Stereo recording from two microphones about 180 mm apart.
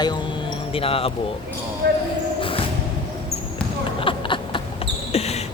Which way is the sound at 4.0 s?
30° left (ahead or behind).